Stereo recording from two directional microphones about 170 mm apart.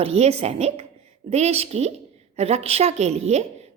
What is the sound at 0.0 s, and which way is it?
A woman's voice, 35° right (ahead or behind).